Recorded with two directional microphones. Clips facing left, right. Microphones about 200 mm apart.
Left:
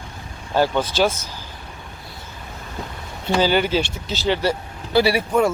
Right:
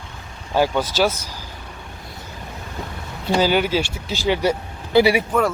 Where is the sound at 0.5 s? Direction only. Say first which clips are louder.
Even; 10° right (ahead or behind).